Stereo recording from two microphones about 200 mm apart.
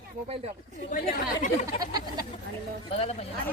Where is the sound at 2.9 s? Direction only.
30° left (ahead or behind).